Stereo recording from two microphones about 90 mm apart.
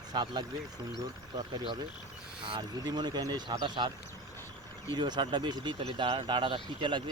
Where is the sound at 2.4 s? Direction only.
70° right (ahead or behind).